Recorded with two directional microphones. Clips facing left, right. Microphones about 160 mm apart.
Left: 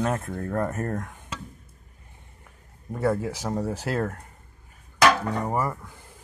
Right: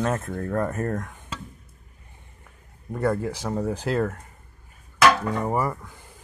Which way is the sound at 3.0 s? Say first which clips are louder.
Even; 10° left (ahead or behind).